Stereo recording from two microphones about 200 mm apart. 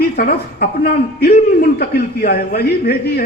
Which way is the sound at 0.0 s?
50° left (ahead or behind).